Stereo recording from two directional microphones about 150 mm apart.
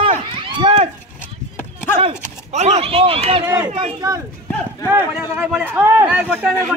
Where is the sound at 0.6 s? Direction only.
45° right (ahead or behind).